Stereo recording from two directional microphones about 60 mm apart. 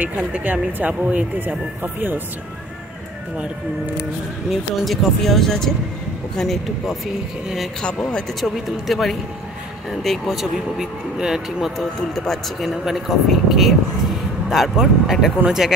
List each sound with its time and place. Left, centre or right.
0.4 s speech: right
4.5 s speech: centre
7.8 s speech: centre
8.4 s speech: centre